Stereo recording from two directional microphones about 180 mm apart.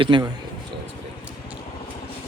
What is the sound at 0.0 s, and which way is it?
Speech, 25° right (ahead or behind).